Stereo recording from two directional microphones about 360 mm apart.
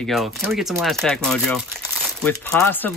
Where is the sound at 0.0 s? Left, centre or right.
Centre.